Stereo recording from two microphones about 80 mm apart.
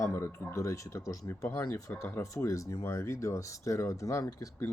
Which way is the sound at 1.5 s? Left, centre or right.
Left.